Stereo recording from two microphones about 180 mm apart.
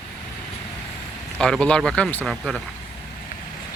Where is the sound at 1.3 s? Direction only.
5° left (ahead or behind).